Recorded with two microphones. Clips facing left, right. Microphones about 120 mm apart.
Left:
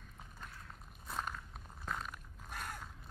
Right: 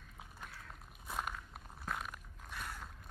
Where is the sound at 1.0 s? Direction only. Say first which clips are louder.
Even; 5° right (ahead or behind).